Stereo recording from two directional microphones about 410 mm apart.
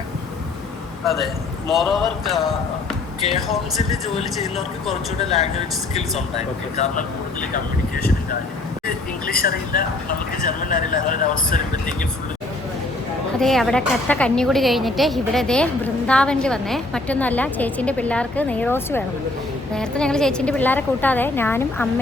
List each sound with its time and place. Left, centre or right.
1.7 s a woman's voice: centre
5.9 s speech: centre
7.5 s speech: left
13.4 s a woman's voice: centre